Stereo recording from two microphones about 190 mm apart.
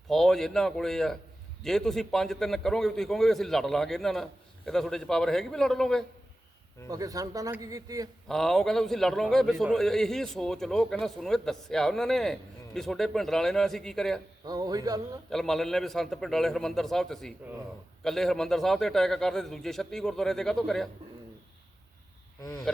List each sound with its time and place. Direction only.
0.1 s a man's voice: centre (ahead or behind)
6.8 s a man's voice: 20° right (ahead or behind)
8.3 s a man's voice: centre (ahead or behind)
14.4 s a man's voice: 20° right (ahead or behind)
15.3 s a man's voice: centre (ahead or behind)